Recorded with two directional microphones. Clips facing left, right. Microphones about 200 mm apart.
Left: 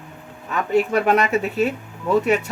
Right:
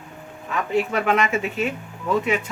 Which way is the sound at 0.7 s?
40° left (ahead or behind).